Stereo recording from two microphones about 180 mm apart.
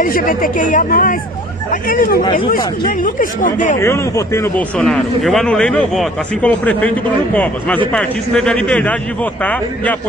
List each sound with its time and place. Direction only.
0.0 s speech: 50° left (ahead or behind)
3.8 s a man's voice: 15° left (ahead or behind)